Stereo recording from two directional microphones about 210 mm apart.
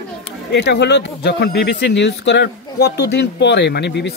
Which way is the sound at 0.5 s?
55° left (ahead or behind).